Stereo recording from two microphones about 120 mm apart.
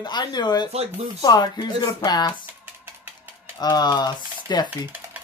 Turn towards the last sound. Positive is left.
turn(degrees=-15)  # may be behind; listen again after turning